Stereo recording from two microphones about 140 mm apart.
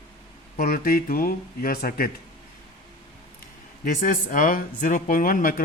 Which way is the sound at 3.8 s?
75° left (ahead or behind).